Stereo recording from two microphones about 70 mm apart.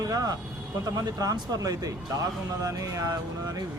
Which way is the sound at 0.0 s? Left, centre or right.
Right.